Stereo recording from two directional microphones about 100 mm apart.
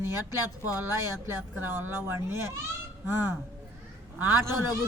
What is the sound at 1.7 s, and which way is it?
Speech, 25° right (ahead or behind).